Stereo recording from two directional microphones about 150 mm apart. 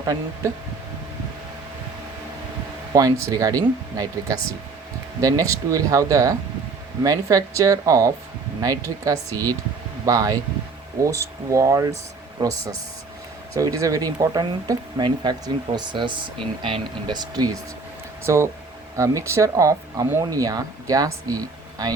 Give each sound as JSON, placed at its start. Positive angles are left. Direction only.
{"t": 0.4, "sound": "speech", "side_deg": -20}
{"t": 2.9, "sound": "speech", "side_deg": -20}
{"t": 13.6, "sound": "speech", "side_deg": -20}